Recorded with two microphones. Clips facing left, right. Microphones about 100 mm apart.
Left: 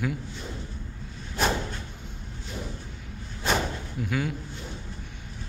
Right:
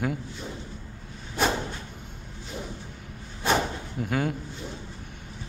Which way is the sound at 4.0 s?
45° right (ahead or behind).